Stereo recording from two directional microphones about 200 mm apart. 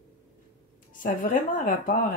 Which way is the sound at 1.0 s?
40° left (ahead or behind).